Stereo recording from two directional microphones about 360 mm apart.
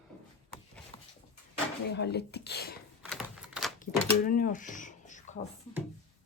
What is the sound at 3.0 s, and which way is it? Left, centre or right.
Typewriter, centre.